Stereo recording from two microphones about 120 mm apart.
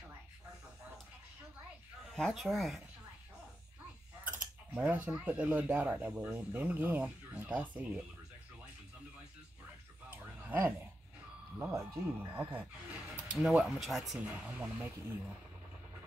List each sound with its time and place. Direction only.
2.1 s speech: centre (ahead or behind)
4.2 s speech: 10° right (ahead or behind)
10.0 s a sound: 15° right (ahead or behind)
11.7 s speech: 25° right (ahead or behind)